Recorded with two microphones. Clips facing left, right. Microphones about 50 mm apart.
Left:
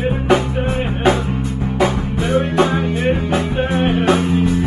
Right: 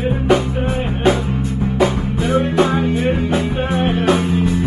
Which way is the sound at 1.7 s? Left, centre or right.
Left.